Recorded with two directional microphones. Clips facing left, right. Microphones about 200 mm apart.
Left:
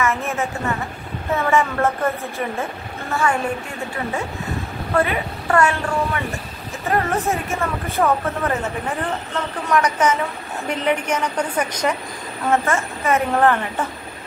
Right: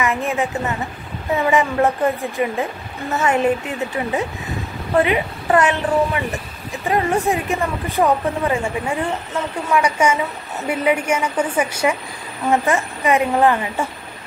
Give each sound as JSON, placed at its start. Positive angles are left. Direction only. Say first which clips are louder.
{"t": 0.0, "sound": "speech", "louder": "right 2 dB", "side_deg": -15}
{"t": 4.9, "sound": "a woman's voice", "louder": "right 3 dB", "side_deg": -20}